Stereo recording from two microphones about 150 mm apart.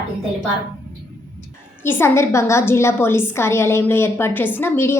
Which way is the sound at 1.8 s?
15° left (ahead or behind).